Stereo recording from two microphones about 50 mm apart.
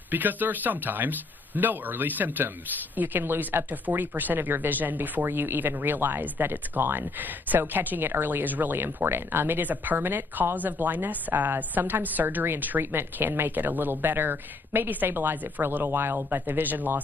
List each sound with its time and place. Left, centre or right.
0.1 s speech: right
8.7 s speech: right